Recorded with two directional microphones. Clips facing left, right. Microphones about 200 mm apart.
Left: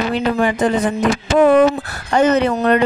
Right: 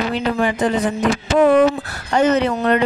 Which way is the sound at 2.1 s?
50° left (ahead or behind).